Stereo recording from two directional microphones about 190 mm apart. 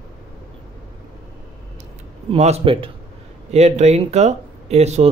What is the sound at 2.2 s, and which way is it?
Speech, 35° right (ahead or behind).